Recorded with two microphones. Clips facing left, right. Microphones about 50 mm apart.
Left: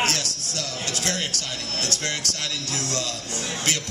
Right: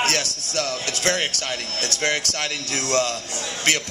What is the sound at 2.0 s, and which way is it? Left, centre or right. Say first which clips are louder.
Speech: right 6 dB; right.